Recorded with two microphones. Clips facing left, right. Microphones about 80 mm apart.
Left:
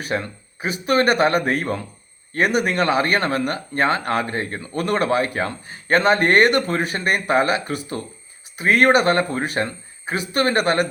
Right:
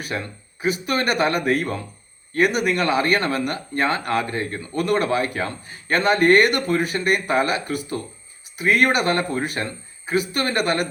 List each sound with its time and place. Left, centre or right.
0.0 s speech: left